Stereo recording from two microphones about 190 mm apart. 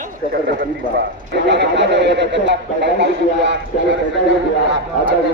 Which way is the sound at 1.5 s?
65° right (ahead or behind).